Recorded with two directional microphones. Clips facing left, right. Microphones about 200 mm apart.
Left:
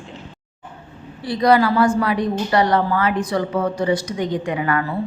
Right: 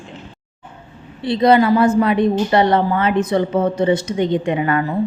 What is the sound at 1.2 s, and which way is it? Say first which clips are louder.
A woman's voice: right 3 dB; 25° right (ahead or behind).